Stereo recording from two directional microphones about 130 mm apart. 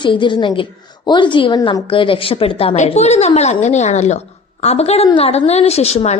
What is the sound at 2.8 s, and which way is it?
A woman's voice, 55° left (ahead or behind).